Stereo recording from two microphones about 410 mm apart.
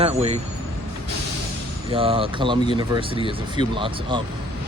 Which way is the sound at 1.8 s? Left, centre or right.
Centre.